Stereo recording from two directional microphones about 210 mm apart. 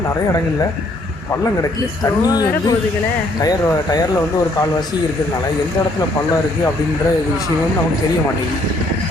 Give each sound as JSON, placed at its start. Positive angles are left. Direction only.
{"t": 2.2, "sound": "speech", "side_deg": 20}